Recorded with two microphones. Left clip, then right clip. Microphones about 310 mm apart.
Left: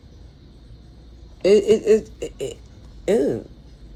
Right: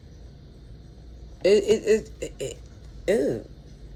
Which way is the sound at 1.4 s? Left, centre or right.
Centre.